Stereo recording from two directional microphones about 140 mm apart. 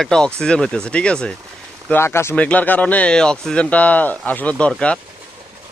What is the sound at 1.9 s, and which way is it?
Speech, 20° left (ahead or behind).